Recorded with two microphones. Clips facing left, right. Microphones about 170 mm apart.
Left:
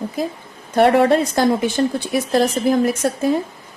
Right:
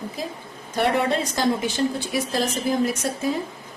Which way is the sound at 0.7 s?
55° left (ahead or behind).